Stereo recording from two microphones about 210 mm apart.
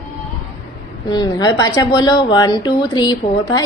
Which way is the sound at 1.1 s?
20° left (ahead or behind).